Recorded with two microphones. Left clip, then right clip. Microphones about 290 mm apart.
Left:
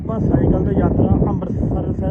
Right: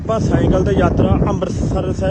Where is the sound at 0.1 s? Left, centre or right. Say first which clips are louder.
Right 3 dB; left.